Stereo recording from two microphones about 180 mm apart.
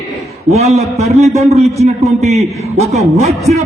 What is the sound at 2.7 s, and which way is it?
Speech, 35° right (ahead or behind).